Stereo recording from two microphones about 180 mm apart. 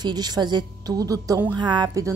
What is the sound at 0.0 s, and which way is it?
Speech, 25° right (ahead or behind).